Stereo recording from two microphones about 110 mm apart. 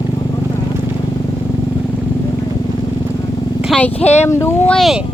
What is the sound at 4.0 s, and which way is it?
Speech, 80° left.